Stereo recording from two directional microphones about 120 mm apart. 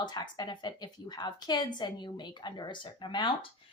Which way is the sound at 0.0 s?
35° left (ahead or behind).